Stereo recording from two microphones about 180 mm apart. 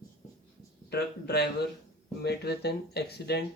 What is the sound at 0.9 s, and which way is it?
Speech, 65° left (ahead or behind).